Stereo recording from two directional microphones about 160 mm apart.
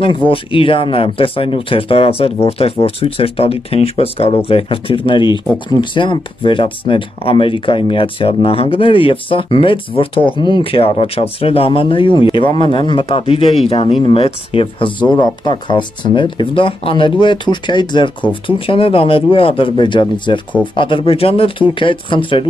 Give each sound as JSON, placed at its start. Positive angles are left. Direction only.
{"t": 0.3, "sound": "speech", "side_deg": 35}